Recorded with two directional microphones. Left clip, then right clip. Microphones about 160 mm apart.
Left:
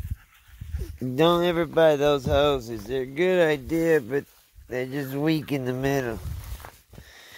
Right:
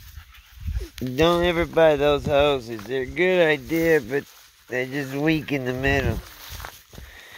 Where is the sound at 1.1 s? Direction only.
15° left (ahead or behind); by 6.7 s centre (ahead or behind).